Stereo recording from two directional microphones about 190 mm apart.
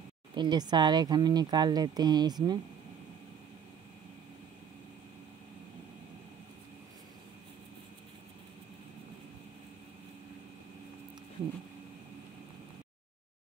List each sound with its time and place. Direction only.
0.3 s speech: 25° right (ahead or behind)